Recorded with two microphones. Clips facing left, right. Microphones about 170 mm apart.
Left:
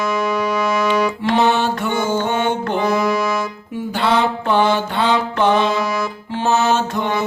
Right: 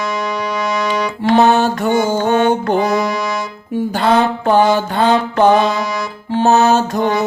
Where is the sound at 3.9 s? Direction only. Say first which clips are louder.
Right 3 dB; 45° right (ahead or behind).